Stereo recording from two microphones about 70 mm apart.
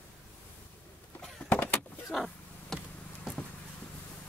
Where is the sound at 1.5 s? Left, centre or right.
Centre.